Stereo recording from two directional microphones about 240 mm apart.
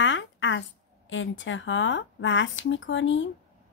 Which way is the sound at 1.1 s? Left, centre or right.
Left.